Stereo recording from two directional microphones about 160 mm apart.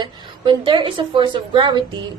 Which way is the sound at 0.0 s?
30° right (ahead or behind).